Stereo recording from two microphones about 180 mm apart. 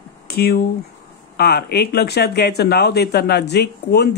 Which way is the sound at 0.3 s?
60° left (ahead or behind).